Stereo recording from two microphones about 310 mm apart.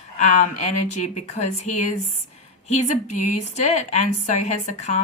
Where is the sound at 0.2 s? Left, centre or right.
Left.